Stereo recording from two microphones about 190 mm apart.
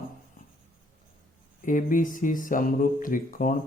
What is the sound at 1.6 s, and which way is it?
Speech, 45° left (ahead or behind).